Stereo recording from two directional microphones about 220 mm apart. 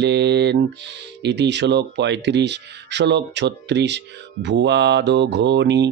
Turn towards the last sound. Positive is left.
turn(degrees=-50)  # may be behind; listen again after turning